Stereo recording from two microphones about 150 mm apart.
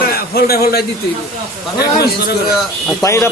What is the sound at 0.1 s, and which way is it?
A man's voice, 90° left.